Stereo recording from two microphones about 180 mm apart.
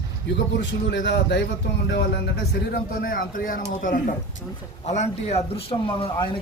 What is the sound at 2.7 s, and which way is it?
Speech, 55° left (ahead or behind).